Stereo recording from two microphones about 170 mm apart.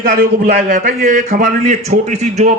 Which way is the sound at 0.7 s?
55° right (ahead or behind).